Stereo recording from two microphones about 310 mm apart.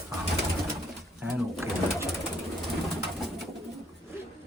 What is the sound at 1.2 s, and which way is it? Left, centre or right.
Speech, centre.